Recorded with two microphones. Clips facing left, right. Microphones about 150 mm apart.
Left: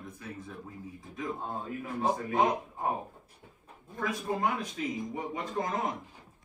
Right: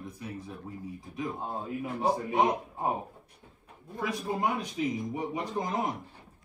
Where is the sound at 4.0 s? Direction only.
10° right (ahead or behind).